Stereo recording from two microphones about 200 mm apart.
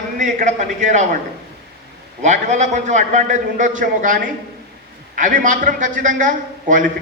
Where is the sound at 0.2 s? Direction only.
40° right (ahead or behind).